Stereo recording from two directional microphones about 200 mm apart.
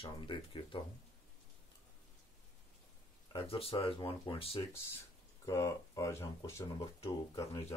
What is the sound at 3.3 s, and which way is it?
Speech, 30° left (ahead or behind).